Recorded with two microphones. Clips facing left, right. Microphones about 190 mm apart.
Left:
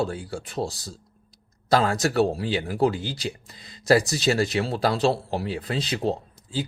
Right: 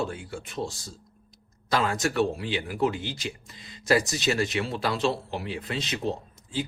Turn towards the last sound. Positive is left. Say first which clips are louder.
# left 2 dB
turn(degrees=35)  # may be behind; listen again after turning